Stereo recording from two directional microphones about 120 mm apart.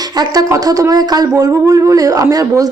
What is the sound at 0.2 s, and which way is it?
Speech, 30° right (ahead or behind).